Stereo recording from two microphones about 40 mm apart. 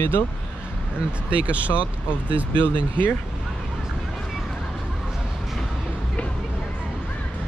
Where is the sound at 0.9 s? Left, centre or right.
Right.